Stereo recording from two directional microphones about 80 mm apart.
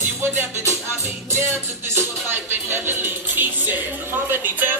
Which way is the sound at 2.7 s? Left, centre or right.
Right.